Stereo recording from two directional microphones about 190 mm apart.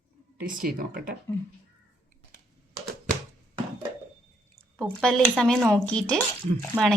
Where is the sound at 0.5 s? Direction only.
50° right (ahead or behind).